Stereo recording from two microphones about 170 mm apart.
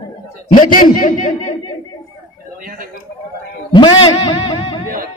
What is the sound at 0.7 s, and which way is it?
Speech, 55° left (ahead or behind).